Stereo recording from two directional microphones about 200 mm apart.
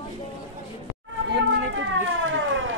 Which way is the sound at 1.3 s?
65° right (ahead or behind).